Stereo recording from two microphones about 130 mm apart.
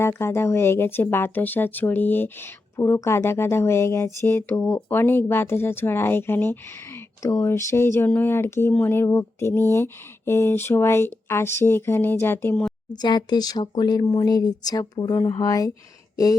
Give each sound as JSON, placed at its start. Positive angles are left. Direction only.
{"t": 0.0, "sound": "speech", "side_deg": 20}
{"t": 4.9, "sound": "a sound", "side_deg": 15}
{"t": 12.9, "sound": "speech", "side_deg": 35}